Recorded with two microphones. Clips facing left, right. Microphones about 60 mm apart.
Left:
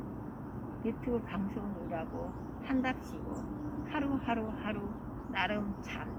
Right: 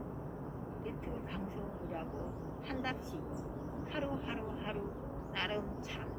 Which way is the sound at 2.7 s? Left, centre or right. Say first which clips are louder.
Left 7 dB; left.